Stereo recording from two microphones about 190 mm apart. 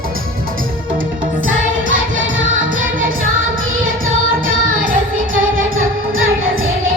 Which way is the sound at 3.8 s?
90° right.